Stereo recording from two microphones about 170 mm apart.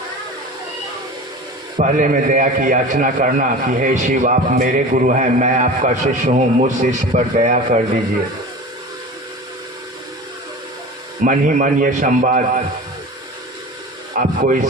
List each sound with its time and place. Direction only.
1.8 s a man's voice: 50° right (ahead or behind)
11.2 s a man's voice: 50° right (ahead or behind)
14.2 s a man's voice: 50° right (ahead or behind)